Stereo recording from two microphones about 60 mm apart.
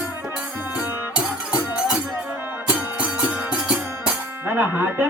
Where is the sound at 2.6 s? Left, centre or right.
Right.